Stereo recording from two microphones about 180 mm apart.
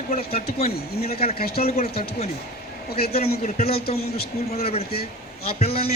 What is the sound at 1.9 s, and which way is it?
Speech, 60° left (ahead or behind).